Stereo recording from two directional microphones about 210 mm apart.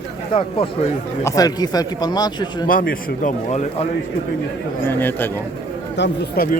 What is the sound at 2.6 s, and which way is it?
Speech, 40° left (ahead or behind).